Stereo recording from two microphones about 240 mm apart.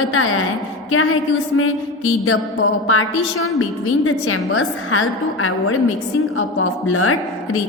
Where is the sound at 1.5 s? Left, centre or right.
Left.